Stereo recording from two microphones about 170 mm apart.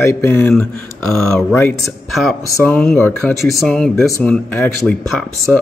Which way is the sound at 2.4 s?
15° left (ahead or behind).